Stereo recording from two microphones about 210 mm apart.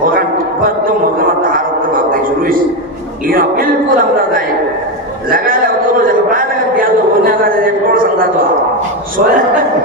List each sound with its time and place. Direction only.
0.0 s music: 40° right (ahead or behind)
3.2 s speech: 40° right (ahead or behind)
5.3 s a sound: 45° right (ahead or behind)